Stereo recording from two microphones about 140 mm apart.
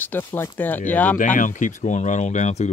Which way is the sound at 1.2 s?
65° left (ahead or behind).